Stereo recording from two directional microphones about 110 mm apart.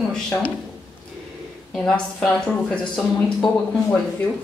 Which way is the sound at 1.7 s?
5° left (ahead or behind).